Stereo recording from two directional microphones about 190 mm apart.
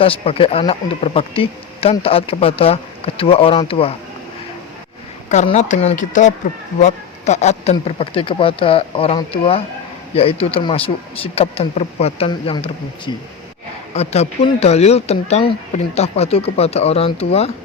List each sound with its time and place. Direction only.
0.0 s speech: 30° left (ahead or behind)
5.3 s speech: 40° left (ahead or behind)
13.9 s speech: 35° left (ahead or behind)